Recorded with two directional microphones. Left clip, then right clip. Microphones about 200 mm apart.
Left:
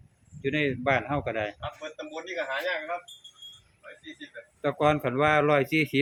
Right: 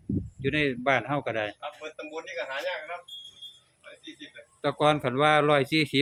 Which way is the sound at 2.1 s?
25° right (ahead or behind).